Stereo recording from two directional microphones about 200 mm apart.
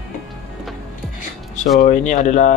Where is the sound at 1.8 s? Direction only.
35° left (ahead or behind).